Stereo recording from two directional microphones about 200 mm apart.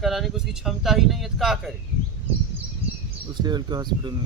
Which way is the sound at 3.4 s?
20° right (ahead or behind).